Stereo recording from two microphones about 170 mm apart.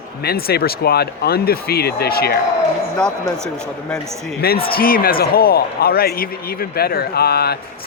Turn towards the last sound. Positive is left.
turn(degrees=65)  # may be behind; listen again after turning